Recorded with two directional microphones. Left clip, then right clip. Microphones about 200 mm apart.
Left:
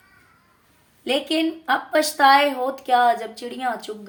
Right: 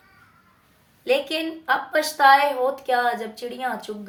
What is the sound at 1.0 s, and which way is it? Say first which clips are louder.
Speech: left 1 dB; 35° left (ahead or behind).